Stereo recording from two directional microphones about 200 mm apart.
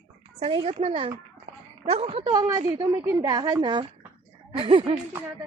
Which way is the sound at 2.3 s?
15° right (ahead or behind).